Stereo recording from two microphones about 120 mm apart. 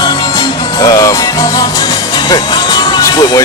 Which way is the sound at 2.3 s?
35° left (ahead or behind).